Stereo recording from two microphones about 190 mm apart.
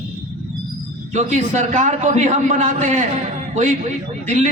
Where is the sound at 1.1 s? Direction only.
40° right (ahead or behind).